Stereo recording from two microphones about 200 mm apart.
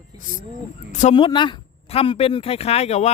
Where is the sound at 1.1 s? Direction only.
25° left (ahead or behind).